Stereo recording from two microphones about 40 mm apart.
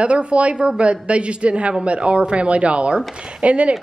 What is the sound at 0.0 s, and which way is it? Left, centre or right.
Speech, right.